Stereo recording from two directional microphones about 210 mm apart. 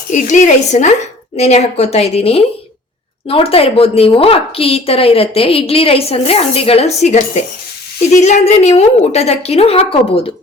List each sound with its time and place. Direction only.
0.1 s a woman's voice: 35° left (ahead or behind)